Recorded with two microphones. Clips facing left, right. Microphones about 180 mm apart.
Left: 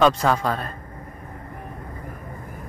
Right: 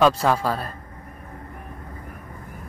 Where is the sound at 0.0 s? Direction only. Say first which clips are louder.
Even; 5° right (ahead or behind).